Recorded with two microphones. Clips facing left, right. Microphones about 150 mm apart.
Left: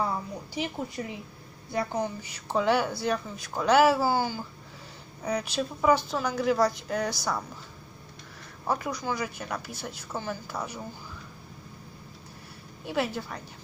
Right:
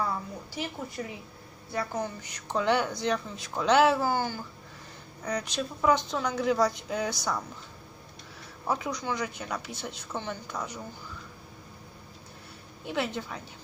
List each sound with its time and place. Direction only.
1.0 s speech: 30° left (ahead or behind); by 7.4 s centre (ahead or behind)
8.6 s speech: centre (ahead or behind)
12.8 s speech: 10° left (ahead or behind)